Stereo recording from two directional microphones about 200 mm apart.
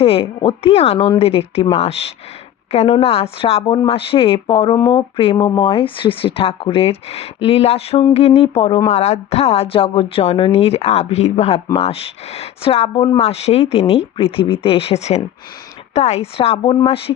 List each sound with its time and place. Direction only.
0.0 s a woman's voice: 30° left (ahead or behind)